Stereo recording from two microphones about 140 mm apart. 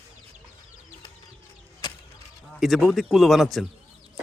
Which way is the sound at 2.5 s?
Centre (ahead or behind).